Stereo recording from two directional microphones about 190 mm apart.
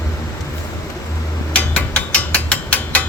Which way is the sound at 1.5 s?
5° left (ahead or behind).